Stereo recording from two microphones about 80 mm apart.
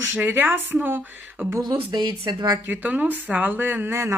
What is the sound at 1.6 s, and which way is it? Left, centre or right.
Speech, right.